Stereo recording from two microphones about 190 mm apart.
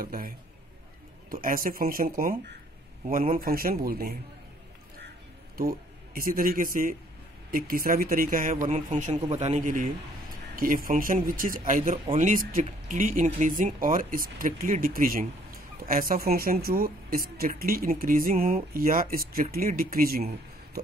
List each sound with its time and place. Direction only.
0.0 s speech: 50° right (ahead or behind)
1.3 s speech: 50° right (ahead or behind)
5.6 s a man's voice: 50° right (ahead or behind)